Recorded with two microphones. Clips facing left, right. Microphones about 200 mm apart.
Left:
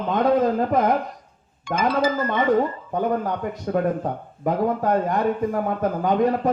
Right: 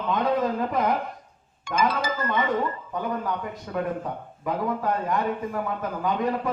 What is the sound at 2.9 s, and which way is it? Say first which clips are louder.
A man's voice: left 6 dB; 45° left (ahead or behind).